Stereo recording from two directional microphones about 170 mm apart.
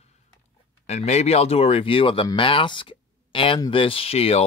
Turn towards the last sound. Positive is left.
turn(degrees=35)  # may be behind; listen again after turning